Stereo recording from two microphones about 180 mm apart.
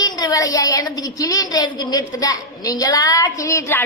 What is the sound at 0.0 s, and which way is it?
A woman's voice, 20° left (ahead or behind).